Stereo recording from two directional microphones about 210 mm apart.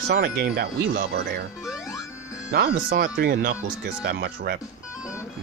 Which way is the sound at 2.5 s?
45° right (ahead or behind).